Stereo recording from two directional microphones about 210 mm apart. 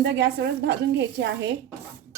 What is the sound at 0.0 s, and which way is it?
A woman's voice, 55° right (ahead or behind).